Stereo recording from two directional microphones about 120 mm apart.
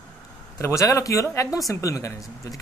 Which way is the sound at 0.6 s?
25° left (ahead or behind).